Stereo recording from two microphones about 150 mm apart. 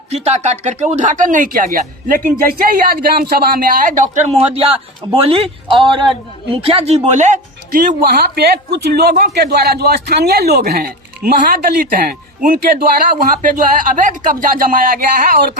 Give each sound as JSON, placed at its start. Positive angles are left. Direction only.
{"t": 0.1, "sound": "speech", "side_deg": -45}
{"t": 2.4, "sound": "speech", "side_deg": -70}
{"t": 6.5, "sound": "speech", "side_deg": -40}
{"t": 8.0, "sound": "a man's voice", "side_deg": -90}